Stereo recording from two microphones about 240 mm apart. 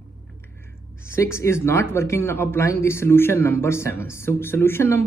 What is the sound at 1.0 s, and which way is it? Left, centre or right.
Speech, centre.